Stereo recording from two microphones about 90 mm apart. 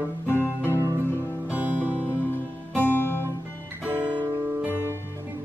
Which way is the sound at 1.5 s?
20° right (ahead or behind).